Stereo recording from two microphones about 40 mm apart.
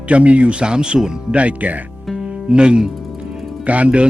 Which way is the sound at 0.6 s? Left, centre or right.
Right.